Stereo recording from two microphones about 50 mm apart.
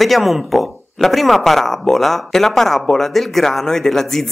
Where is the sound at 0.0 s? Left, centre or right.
Centre.